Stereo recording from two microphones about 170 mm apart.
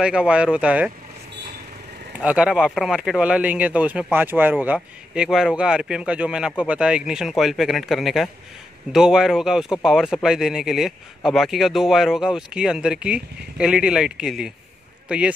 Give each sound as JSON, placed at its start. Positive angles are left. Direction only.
{"t": 0.0, "sound": "speech", "side_deg": -5}
{"t": 2.1, "sound": "speech", "side_deg": -5}